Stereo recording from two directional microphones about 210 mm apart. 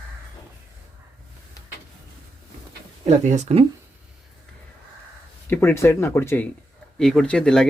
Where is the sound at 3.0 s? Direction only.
35° right (ahead or behind).